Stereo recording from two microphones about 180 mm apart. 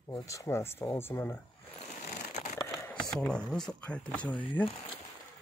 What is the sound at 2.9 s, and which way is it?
Speech, 5° left (ahead or behind).